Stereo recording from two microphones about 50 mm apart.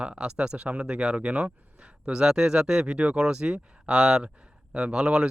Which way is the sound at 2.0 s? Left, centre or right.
Centre.